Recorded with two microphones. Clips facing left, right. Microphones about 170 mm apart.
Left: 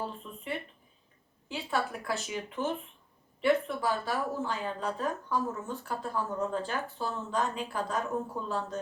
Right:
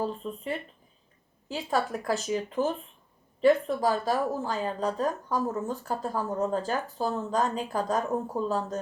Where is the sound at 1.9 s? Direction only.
40° right (ahead or behind).